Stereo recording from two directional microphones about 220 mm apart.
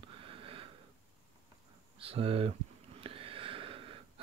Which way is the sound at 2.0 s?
25° right (ahead or behind).